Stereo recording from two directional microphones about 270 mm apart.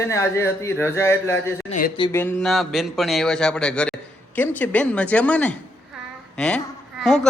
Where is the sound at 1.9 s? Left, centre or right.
Centre.